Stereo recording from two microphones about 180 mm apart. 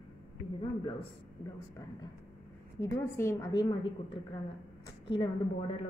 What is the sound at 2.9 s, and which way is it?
Speech, 15° left (ahead or behind).